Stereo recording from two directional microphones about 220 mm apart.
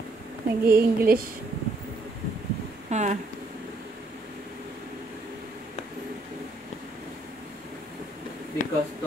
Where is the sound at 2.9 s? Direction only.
30° right (ahead or behind).